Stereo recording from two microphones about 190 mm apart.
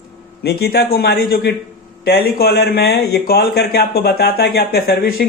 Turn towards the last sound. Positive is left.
turn(degrees=50)  # may be behind; listen again after turning